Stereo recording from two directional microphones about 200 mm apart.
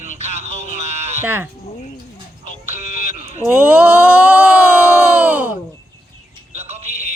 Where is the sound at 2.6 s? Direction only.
35° right (ahead or behind).